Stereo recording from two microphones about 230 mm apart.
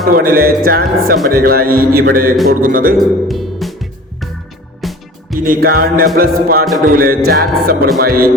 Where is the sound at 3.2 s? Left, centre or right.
Centre.